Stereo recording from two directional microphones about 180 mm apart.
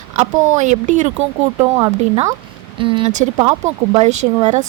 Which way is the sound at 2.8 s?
30° right (ahead or behind).